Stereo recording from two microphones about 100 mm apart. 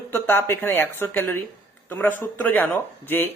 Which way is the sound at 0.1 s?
25° left (ahead or behind).